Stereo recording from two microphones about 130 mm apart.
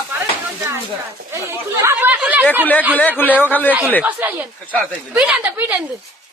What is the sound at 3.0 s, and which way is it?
Speech, 15° left (ahead or behind).